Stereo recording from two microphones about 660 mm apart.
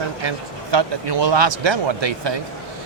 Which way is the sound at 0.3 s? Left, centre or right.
Right.